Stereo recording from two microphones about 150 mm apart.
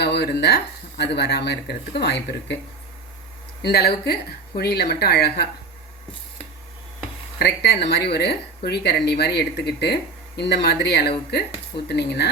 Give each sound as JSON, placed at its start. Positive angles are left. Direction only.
{"t": 0.0, "sound": "speech", "side_deg": 90}
{"t": 3.6, "sound": "speech", "side_deg": 90}
{"t": 7.3, "sound": "speech", "side_deg": 90}